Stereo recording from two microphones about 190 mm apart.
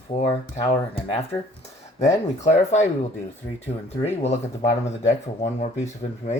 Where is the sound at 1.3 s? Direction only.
15° left (ahead or behind).